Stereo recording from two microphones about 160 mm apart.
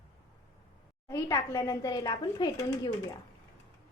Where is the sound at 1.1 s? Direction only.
20° left (ahead or behind).